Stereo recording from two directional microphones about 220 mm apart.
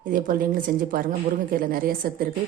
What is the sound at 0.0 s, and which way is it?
A woman's voice, 40° right (ahead or behind).